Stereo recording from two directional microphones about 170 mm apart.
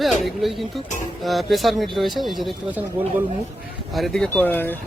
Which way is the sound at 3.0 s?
10° right (ahead or behind).